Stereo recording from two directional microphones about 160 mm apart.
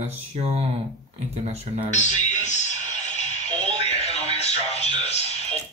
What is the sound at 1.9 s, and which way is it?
Music, 50° left (ahead or behind).